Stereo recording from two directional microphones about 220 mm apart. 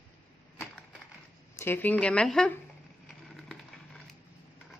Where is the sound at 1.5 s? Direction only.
10° left (ahead or behind).